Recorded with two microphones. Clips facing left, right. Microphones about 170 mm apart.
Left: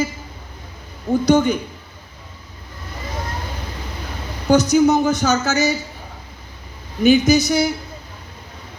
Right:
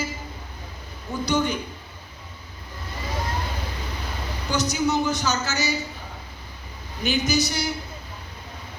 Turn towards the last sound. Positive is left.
turn(degrees=50)  # may be behind; listen again after turning